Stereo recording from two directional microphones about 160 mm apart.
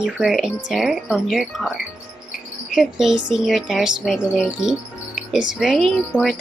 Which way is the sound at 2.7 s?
Centre (ahead or behind).